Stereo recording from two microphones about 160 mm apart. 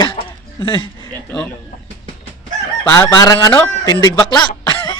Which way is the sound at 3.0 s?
20° left (ahead or behind).